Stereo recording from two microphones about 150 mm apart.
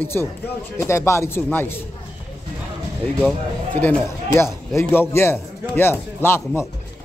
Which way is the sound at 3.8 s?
10° left (ahead or behind).